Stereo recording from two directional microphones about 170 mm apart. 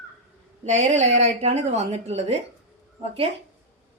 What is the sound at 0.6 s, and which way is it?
A woman's voice, 40° right (ahead or behind).